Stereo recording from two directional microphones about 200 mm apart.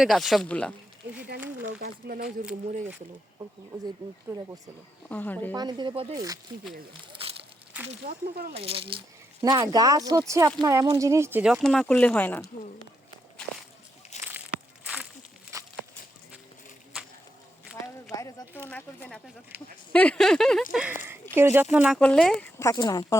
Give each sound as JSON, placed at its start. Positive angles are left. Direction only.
{"t": 0.0, "sound": "speech", "side_deg": 0}
{"t": 1.4, "sound": "speech", "side_deg": -10}
{"t": 1.8, "sound": "speech", "side_deg": -50}
{"t": 4.3, "sound": "speech", "side_deg": -15}
{"t": 5.0, "sound": "speech", "side_deg": 10}
{"t": 5.5, "sound": "speech", "side_deg": -20}
{"t": 7.1, "sound": "crumpling", "side_deg": -30}
{"t": 8.0, "sound": "speech", "side_deg": -50}
{"t": 8.5, "sound": "speech", "side_deg": -30}
{"t": 14.1, "sound": "a sound", "side_deg": 35}
{"t": 18.1, "sound": "speech", "side_deg": 15}
{"t": 20.7, "sound": "speech", "side_deg": -10}
{"t": 22.5, "sound": "speech", "side_deg": 15}